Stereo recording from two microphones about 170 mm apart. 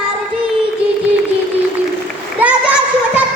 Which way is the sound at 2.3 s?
10° right (ahead or behind).